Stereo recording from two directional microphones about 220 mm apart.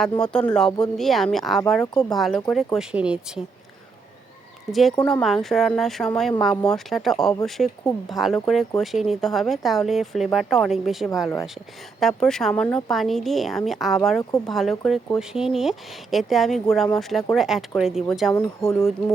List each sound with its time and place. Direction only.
0.0 s speech: 5° left (ahead or behind)
1.8 s speech: 15° left (ahead or behind)
2.0 s speech: centre (ahead or behind)
4.7 s speech: centre (ahead or behind)
18.3 s speech: 15° left (ahead or behind)